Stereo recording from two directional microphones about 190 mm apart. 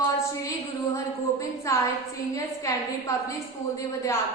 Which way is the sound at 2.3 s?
15° left (ahead or behind).